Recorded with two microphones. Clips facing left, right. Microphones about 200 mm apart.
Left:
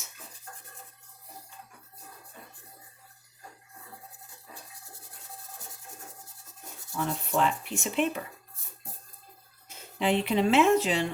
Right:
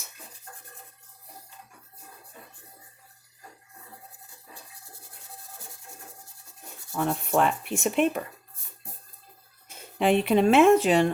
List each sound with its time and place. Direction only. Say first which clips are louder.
6.9 s speech: right 4 dB; 55° right (ahead or behind)
9.6 s speech: right 4 dB; 55° right (ahead or behind)